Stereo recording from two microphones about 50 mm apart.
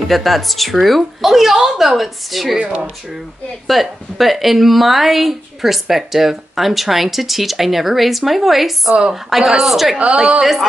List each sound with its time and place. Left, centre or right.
0.1 s speech: centre
2.6 s a woman's voice: right
3.6 s speech: centre
9.9 s a woman's voice: right